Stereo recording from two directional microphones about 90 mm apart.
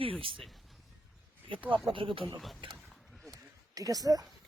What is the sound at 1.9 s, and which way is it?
Speech, 75° right (ahead or behind).